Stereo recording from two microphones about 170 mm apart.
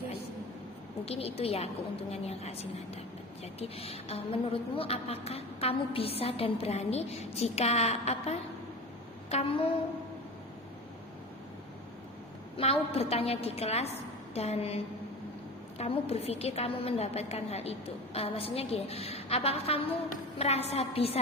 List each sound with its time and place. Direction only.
1.0 s a woman's voice: 35° left (ahead or behind)
12.5 s a woman's voice: 35° left (ahead or behind)
15.8 s a woman's voice: 35° left (ahead or behind)